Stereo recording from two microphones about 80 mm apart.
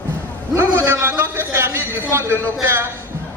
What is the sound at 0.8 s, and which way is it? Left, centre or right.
A man's voice, right.